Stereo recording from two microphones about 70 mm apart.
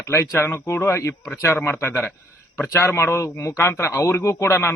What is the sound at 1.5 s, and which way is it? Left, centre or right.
Speech, left.